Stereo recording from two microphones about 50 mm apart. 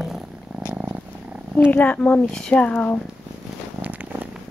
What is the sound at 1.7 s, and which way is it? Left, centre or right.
Speech, left.